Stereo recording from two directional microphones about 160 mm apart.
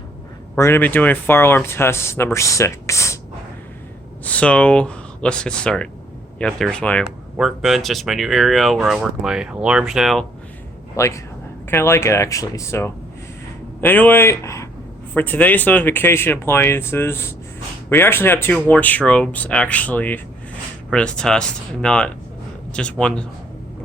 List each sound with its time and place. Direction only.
0.5 s speech: 15° left (ahead or behind)
4.2 s speech: 10° left (ahead or behind)
7.0 s speech: 5° right (ahead or behind)
10.9 s a man's voice: 20° left (ahead or behind)